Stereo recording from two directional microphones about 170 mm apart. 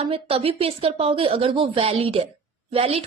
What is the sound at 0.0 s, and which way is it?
A woman's voice, 35° right (ahead or behind).